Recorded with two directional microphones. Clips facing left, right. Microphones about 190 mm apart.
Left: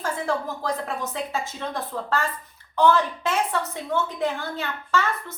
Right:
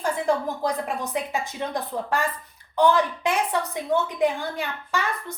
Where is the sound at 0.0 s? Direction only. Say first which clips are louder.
Right 3 dB; 15° right (ahead or behind).